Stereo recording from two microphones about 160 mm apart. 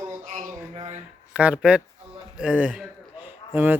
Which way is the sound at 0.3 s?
45° right (ahead or behind).